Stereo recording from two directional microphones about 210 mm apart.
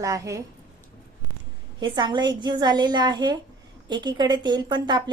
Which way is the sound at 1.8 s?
20° right (ahead or behind).